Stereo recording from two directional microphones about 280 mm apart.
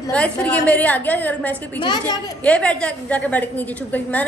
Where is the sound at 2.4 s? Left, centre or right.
Centre.